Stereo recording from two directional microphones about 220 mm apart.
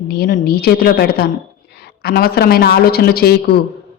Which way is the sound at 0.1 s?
45° left (ahead or behind).